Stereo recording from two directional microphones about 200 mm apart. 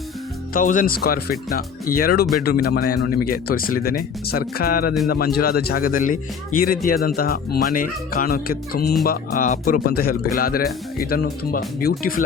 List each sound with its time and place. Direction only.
0.5 s speech: 40° left (ahead or behind)